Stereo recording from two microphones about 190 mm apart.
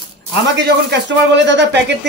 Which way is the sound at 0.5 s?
65° right (ahead or behind).